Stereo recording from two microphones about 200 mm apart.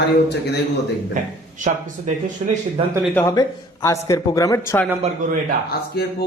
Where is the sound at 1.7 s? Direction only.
35° right (ahead or behind).